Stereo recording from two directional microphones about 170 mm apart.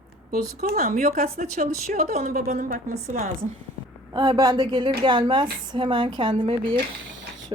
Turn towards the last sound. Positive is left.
turn(degrees=-30)  # may be behind; listen again after turning